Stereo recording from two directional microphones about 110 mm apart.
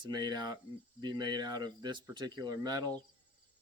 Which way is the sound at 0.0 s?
40° right (ahead or behind).